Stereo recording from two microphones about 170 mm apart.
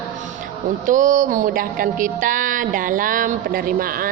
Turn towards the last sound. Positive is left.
turn(degrees=-55)  # may be behind; listen again after turning